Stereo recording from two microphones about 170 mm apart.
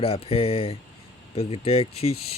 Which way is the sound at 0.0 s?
35° left (ahead or behind).